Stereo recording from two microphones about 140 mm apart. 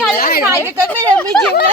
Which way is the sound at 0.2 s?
90° left.